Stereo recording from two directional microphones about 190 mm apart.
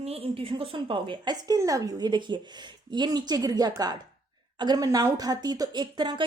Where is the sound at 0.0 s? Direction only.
30° right (ahead or behind).